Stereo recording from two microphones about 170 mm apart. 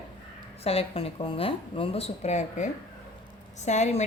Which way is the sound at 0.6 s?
35° left (ahead or behind).